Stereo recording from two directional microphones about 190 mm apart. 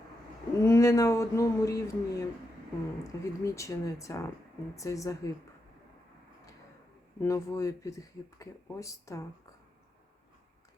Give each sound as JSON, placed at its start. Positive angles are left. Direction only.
{"t": 0.6, "sound": "speech", "side_deg": 15}
{"t": 7.2, "sound": "speech", "side_deg": 15}